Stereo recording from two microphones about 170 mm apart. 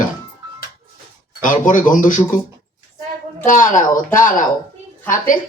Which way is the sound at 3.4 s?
50° left (ahead or behind).